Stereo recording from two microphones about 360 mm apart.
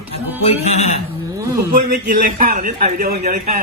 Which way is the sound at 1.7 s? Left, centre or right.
Right.